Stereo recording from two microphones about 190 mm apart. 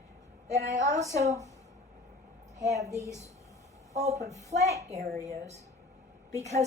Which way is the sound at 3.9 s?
35° right (ahead or behind).